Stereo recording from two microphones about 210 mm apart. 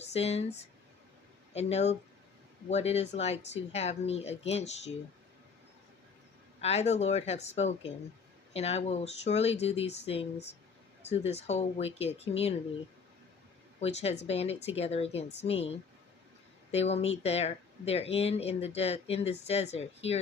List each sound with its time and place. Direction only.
0.0 s speech: 30° left (ahead or behind)
6.6 s speech: 30° left (ahead or behind)
13.7 s a woman's voice: 30° left (ahead or behind)
16.7 s speech: 30° left (ahead or behind)